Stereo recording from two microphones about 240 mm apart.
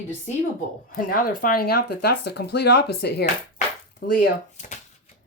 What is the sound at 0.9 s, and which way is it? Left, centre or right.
Speech, left.